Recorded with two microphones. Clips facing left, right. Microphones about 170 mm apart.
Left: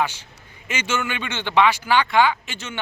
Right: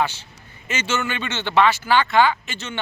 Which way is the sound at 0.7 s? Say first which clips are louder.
Right 1 dB; 10° left (ahead or behind).